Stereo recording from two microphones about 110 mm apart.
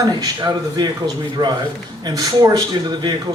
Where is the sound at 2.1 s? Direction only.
30° right (ahead or behind).